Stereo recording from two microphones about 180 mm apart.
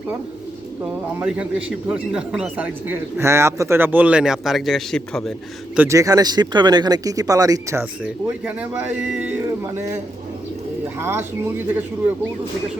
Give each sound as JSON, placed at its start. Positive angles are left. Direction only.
{"t": 1.2, "sound": "a man's voice", "side_deg": -5}
{"t": 5.7, "sound": "speech", "side_deg": -15}
{"t": 9.0, "sound": "a sound", "side_deg": -5}
{"t": 9.7, "sound": "a man's voice", "side_deg": -15}